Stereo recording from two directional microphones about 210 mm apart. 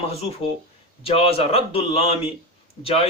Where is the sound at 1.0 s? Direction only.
25° left (ahead or behind).